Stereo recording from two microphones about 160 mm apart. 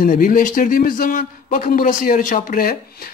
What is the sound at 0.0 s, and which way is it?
A man's voice, 55° left (ahead or behind).